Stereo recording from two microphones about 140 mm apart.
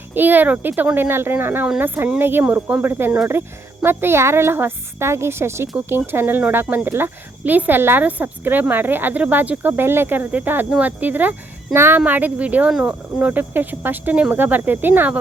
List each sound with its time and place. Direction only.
0.1 s speech: 15° right (ahead or behind)